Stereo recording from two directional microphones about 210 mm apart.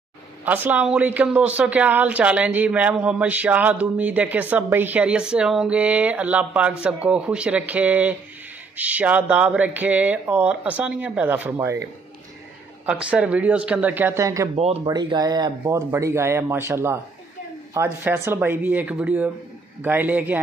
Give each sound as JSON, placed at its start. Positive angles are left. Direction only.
{"t": 0.5, "sound": "speech", "side_deg": -5}
{"t": 12.8, "sound": "speech", "side_deg": -5}
{"t": 14.5, "sound": "speech", "side_deg": -30}
{"t": 14.9, "sound": "speech", "side_deg": -20}